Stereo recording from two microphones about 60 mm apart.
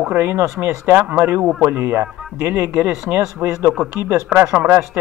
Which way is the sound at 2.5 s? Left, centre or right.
Right.